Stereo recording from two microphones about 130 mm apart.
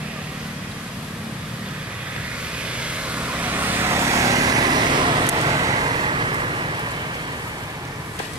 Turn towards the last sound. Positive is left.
turn(degrees=-40)  # may be behind; listen again after turning